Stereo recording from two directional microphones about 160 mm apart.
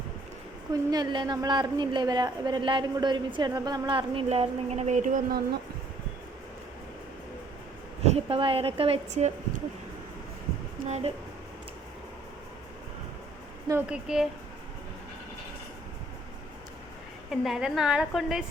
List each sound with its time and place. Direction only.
0.7 s a woman's voice: 25° right (ahead or behind); by 5.4 s 55° right (ahead or behind)
8.0 s a woman's voice: 40° right (ahead or behind)
10.8 s speech: 45° right (ahead or behind)
13.8 s a woman's voice: 5° right (ahead or behind)
17.4 s a woman's voice: 5° right (ahead or behind)